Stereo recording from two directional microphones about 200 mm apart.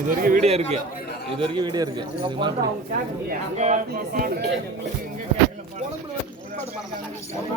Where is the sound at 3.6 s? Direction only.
35° right (ahead or behind).